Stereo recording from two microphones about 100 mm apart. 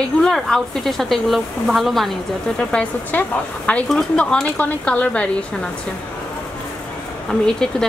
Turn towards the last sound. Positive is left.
turn(degrees=5)  # may be behind; listen again after turning